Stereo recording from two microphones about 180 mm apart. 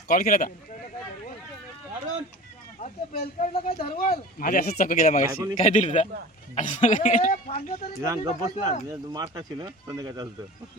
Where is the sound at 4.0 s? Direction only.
50° left (ahead or behind).